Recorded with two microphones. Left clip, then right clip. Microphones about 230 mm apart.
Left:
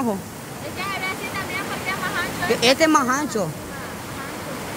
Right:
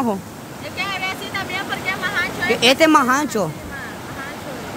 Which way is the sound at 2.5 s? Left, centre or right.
Centre.